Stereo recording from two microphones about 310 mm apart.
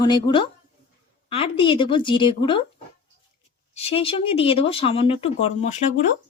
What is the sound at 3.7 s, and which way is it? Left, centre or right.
Speech, centre.